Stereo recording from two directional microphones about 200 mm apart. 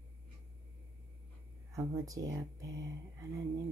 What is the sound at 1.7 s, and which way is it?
Speech, 15° right (ahead or behind).